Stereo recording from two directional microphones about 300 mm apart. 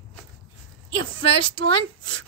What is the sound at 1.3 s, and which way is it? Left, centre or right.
Speech, centre.